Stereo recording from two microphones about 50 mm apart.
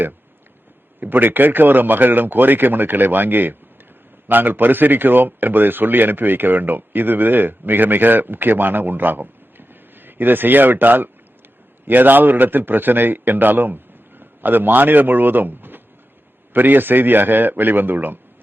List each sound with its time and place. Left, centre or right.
0.9 s a man's voice: right